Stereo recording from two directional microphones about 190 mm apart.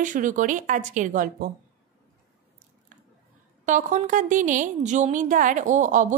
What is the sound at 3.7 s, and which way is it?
A woman's voice, 40° right (ahead or behind).